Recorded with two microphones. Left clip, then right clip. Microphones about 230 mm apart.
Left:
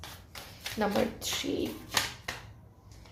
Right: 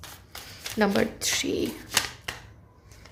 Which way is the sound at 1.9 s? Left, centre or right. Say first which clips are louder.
Right 3 dB; right.